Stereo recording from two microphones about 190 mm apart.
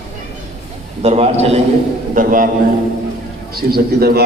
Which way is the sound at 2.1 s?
45° right (ahead or behind).